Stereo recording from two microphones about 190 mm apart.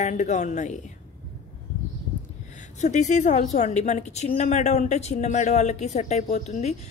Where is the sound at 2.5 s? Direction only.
40° left (ahead or behind).